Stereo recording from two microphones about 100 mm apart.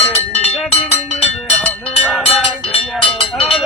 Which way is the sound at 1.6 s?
10° left (ahead or behind).